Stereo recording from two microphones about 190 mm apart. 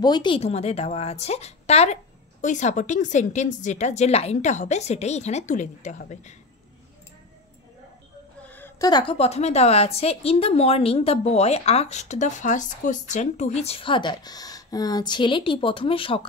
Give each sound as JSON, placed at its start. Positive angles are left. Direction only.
{"t": 0.0, "sound": "a woman's voice", "side_deg": 25}
{"t": 8.5, "sound": "a woman's voice", "side_deg": 10}